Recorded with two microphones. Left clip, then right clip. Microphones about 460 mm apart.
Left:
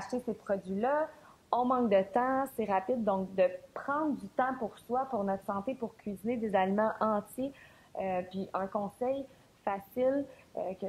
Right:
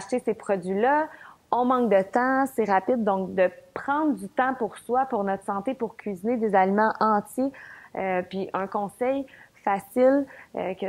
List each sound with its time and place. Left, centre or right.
0.1 s a woman's voice: right